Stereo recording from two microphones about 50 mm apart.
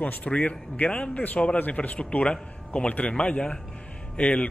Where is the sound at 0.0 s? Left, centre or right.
Left.